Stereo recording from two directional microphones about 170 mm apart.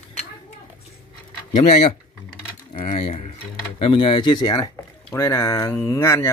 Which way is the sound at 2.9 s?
40° left (ahead or behind).